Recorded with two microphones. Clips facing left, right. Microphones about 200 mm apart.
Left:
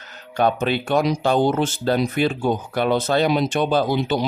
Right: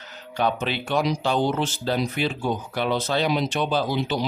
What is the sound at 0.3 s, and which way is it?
Speech, 50° left (ahead or behind).